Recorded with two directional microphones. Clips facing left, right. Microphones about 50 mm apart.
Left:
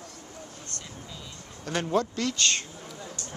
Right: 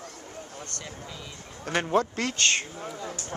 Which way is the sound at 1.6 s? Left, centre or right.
Right.